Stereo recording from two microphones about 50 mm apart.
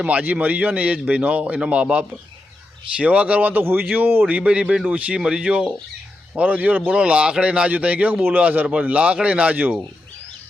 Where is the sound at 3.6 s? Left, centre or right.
Right.